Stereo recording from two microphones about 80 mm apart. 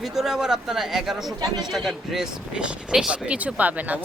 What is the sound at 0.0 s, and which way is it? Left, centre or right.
Speech, centre.